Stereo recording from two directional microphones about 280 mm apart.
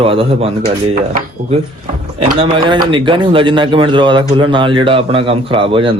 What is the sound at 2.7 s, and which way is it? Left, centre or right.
A man's voice, centre.